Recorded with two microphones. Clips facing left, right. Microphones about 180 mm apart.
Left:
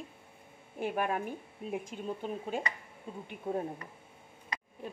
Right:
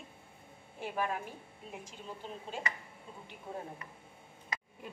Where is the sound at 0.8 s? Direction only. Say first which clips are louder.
Left 4 dB; 55° left (ahead or behind).